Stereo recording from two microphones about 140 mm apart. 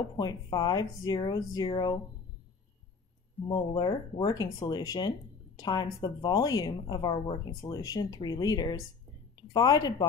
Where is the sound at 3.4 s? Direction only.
30° left (ahead or behind).